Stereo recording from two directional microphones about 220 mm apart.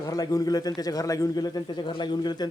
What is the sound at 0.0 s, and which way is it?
A man's voice, 15° left (ahead or behind).